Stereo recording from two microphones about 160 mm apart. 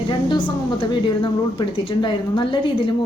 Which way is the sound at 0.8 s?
30° left (ahead or behind).